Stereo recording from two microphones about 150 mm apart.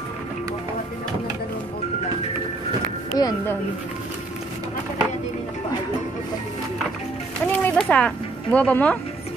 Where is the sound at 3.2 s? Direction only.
25° left (ahead or behind).